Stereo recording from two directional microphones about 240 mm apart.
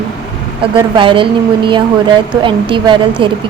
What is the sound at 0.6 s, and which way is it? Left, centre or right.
A woman's voice, right.